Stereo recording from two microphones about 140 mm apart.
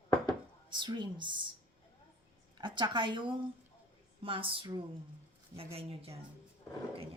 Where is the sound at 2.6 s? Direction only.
35° right (ahead or behind).